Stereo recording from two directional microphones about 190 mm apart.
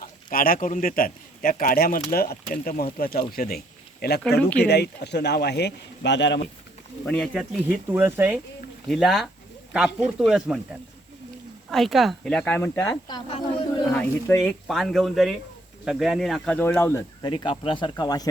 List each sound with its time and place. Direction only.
0.3 s speech: 50° left (ahead or behind); by 6.5 s 65° left (ahead or behind)
7.0 s speech: 5° left (ahead or behind)
7.7 s speech: 10° right (ahead or behind)
11.7 s speech: centre (ahead or behind); by 13.8 s 25° left (ahead or behind)
13.9 s speech: 10° left (ahead or behind)
17.2 s speech: 25° left (ahead or behind)